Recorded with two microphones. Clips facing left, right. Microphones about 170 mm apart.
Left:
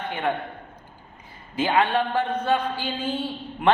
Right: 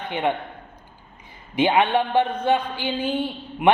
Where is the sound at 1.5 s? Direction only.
15° right (ahead or behind).